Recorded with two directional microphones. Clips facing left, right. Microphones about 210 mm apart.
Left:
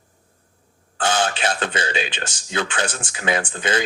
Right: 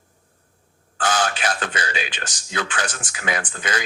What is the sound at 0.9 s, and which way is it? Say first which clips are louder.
A man's voice: left 1 dB; 25° left (ahead or behind).